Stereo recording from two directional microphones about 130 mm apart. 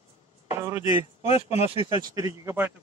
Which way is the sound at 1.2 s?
55° left (ahead or behind).